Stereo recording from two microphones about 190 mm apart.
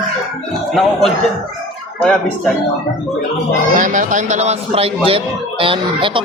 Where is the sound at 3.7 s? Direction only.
40° right (ahead or behind).